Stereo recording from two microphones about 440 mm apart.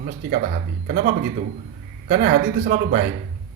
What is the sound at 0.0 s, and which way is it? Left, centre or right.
Speech, centre.